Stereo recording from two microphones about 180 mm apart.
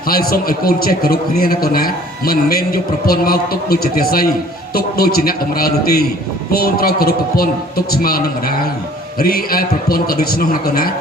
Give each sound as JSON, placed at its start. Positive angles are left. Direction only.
{"t": 0.1, "sound": "a man's voice", "side_deg": 55}